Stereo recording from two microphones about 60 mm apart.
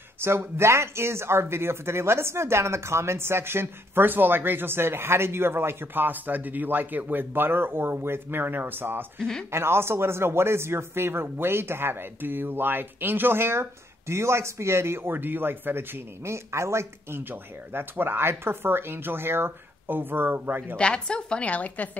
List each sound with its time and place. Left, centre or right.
0.2 s speech: right
9.2 s speech: centre
9.5 s speech: right
16.3 s speech: right
17.2 s speech: right
20.7 s a woman's voice: centre